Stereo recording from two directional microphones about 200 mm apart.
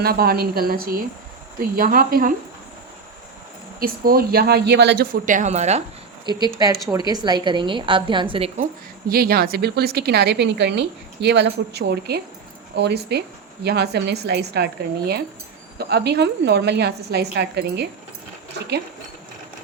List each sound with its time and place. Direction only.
0.0 s speech: 50° right (ahead or behind)
3.8 s speech: 50° right (ahead or behind)
5.2 s speech: 40° right (ahead or behind)
6.3 s a woman's voice: 20° right (ahead or behind)
9.0 s a woman's voice: 50° right (ahead or behind)